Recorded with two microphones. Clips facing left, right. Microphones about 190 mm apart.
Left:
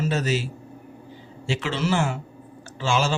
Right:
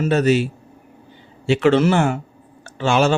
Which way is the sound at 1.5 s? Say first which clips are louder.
Right 10 dB; 60° right (ahead or behind).